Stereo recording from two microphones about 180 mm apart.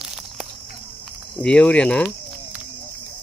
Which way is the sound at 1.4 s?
5° left (ahead or behind).